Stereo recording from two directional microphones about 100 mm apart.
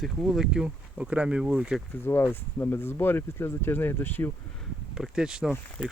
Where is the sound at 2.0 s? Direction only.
20° left (ahead or behind).